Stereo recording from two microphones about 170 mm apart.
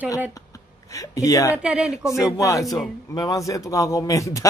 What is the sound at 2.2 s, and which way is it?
A man's voice, 20° left (ahead or behind).